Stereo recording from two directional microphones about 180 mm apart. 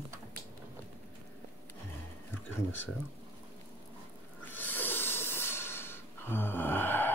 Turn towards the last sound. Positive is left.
turn(degrees=10)  # may be behind; listen again after turning